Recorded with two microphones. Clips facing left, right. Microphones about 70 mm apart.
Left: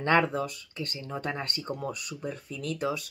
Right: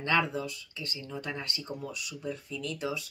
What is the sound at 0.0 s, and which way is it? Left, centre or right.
Speech, left.